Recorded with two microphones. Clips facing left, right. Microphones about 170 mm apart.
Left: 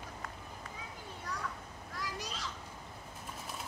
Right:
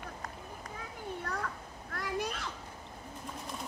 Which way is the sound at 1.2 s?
60° right (ahead or behind).